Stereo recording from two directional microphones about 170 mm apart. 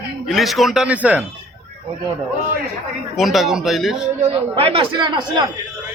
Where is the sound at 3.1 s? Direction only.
Centre (ahead or behind).